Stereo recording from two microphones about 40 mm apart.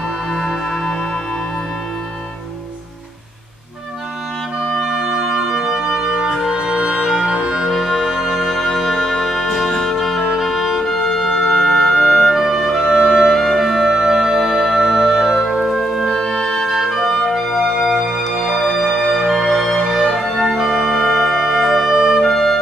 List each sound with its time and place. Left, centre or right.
0.3 s music: centre
4.6 s clarinet: centre
5.3 s music: centre
7.1 s music: centre
7.7 s music: centre
13.0 s music: centre
16.3 s music: centre
16.6 s music: centre
18.3 s music: centre
19.8 s music: centre
22.2 s music: centre